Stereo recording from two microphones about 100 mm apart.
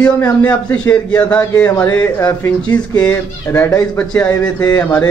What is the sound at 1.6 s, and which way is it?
Speech, 30° left (ahead or behind).